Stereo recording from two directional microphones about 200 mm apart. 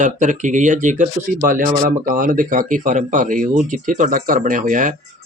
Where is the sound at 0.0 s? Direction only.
40° right (ahead or behind).